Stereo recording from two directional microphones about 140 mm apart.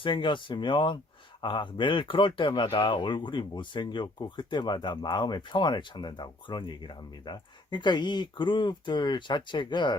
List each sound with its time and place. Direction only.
0.0 s speech: 35° left (ahead or behind)